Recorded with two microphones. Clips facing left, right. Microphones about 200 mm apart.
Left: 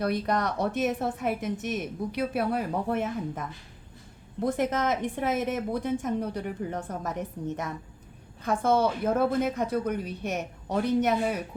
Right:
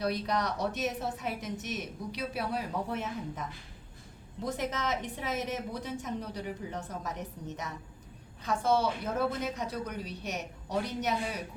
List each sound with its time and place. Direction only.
0.0 s a woman's voice: 55° left (ahead or behind)